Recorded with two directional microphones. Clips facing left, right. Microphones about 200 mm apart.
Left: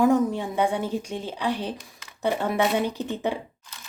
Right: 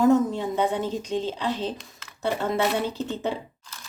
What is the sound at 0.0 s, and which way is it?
A woman's voice, 15° left (ahead or behind).